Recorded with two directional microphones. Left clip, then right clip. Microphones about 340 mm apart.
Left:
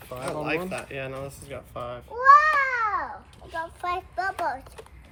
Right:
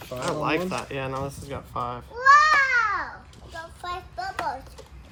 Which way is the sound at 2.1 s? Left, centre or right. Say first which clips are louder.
Even; centre.